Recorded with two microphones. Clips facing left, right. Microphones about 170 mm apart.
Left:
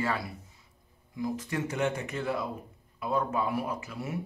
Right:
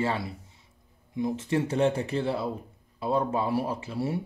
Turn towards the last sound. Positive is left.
turn(degrees=-30)  # may be behind; listen again after turning